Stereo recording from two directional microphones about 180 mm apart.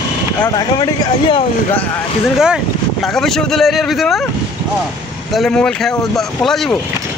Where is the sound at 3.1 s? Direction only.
Centre (ahead or behind).